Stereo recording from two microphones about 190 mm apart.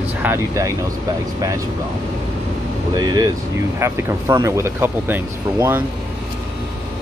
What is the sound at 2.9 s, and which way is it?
Speech, 20° right (ahead or behind).